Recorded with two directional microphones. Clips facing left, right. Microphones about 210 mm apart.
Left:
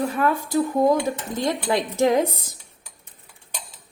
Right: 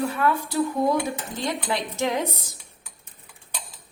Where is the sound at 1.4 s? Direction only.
45° left (ahead or behind).